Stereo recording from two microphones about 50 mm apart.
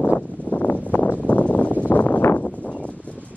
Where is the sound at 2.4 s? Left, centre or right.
Centre.